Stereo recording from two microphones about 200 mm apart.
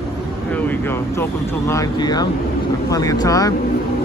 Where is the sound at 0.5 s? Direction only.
10° left (ahead or behind).